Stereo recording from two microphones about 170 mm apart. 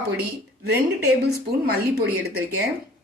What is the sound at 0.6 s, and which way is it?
Speech, 80° right.